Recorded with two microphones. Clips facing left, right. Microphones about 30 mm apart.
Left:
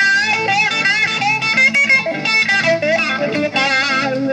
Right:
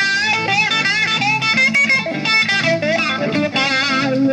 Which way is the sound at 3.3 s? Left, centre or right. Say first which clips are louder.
Left 2 dB; centre.